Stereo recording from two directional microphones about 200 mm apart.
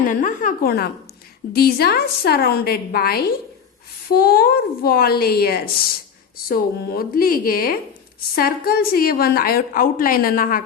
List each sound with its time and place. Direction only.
0.1 s a woman's voice: 40° left (ahead or behind)